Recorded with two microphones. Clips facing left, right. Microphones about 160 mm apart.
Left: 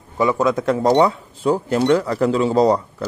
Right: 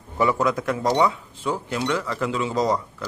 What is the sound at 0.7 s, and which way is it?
Speech, 35° left (ahead or behind).